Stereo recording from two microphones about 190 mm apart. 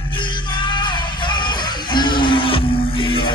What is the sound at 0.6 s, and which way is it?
Music, 25° left (ahead or behind).